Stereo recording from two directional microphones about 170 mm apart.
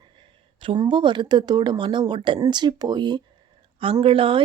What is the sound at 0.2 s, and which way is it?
A woman's voice, 30° right (ahead or behind).